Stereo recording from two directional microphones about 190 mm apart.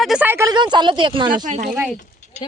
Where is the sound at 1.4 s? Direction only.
45° right (ahead or behind).